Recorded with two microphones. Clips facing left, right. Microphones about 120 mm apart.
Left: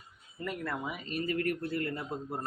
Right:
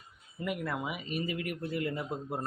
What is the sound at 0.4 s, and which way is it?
Speech, 10° right (ahead or behind).